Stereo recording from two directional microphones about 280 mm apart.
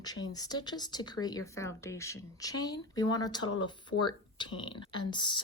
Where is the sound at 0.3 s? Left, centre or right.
Centre.